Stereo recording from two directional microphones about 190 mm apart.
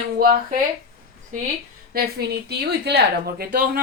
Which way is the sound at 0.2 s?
50° right (ahead or behind).